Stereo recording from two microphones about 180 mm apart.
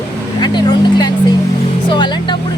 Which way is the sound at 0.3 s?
25° left (ahead or behind).